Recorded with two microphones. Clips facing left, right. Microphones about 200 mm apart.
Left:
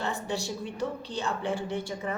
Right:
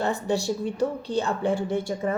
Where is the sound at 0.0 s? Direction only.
40° right (ahead or behind).